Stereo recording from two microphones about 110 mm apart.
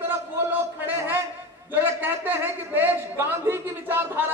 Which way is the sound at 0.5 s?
20° right (ahead or behind).